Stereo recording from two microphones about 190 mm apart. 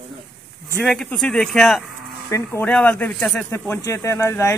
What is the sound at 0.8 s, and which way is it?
Speech, centre (ahead or behind).